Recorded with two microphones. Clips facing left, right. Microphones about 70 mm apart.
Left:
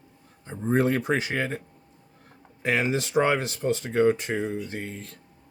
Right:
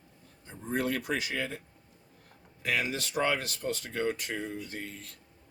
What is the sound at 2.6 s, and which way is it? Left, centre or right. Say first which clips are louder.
A man's voice: left 7 dB; left.